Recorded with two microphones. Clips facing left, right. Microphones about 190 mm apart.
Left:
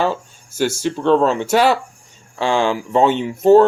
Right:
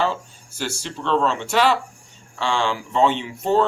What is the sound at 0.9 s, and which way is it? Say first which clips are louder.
Speech: left 6 dB; 50° left (ahead or behind).